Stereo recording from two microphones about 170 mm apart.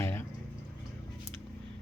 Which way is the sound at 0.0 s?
15° left (ahead or behind).